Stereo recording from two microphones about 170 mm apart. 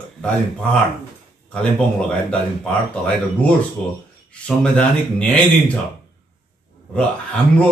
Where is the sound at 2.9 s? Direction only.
10° left (ahead or behind).